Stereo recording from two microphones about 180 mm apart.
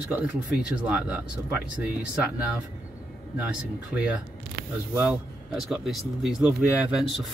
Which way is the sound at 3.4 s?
5° right (ahead or behind).